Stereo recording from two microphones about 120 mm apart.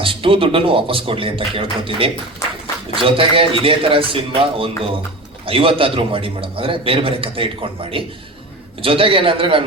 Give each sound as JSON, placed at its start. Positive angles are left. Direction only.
{"t": 0.0, "sound": "a man's voice", "side_deg": -50}